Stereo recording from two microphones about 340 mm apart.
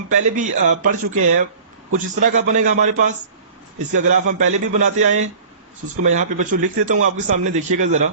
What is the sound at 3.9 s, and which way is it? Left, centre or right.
A man's voice, right.